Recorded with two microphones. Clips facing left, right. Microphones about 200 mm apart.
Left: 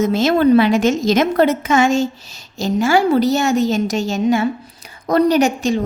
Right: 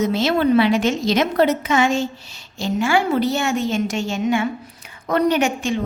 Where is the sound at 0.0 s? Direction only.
45° left (ahead or behind).